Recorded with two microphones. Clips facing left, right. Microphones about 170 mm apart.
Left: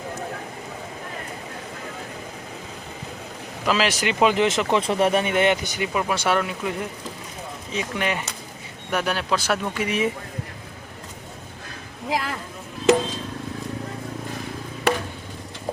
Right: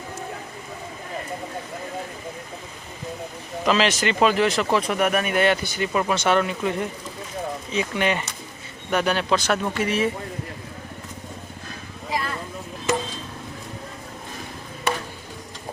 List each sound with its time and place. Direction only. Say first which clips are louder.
3.7 s speech: right 2 dB; 5° left (ahead or behind)
5.9 s speech: right 2 dB; 5° left (ahead or behind)
12.0 s a sound: left 2 dB; 85° left